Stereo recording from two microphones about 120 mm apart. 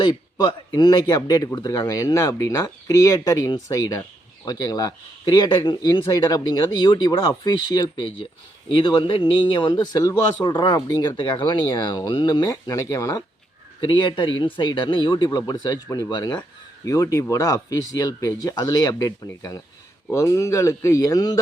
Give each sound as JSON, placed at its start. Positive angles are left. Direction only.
{"t": 0.0, "sound": "speech", "side_deg": 35}
{"t": 13.8, "sound": "speech", "side_deg": 45}